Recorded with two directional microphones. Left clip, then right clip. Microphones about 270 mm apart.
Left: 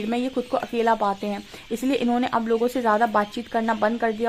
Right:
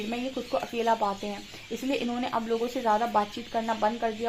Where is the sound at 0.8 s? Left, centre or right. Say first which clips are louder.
Left 5 dB; left.